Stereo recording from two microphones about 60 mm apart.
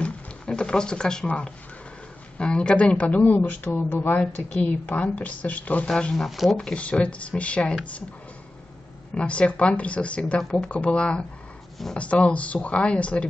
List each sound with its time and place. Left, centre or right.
0.0 s a sound: centre
1.2 s speech: centre
4.2 s speech: left
6.1 s speech: centre
6.5 s speech: centre
9.1 s speech: centre